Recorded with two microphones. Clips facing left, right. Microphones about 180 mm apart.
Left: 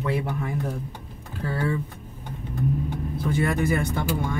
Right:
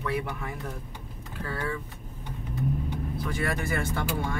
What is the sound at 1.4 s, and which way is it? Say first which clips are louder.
Speech: left 6 dB; 30° left (ahead or behind).